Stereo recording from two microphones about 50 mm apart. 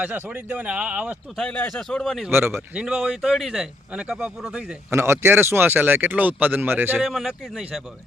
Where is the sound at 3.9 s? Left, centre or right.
Centre.